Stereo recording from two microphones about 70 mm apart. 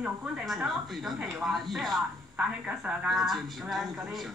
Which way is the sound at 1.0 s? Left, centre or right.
Centre.